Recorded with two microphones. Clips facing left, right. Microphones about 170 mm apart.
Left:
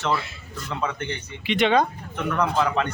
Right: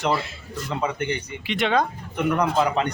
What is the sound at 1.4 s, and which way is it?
Speech, centre (ahead or behind).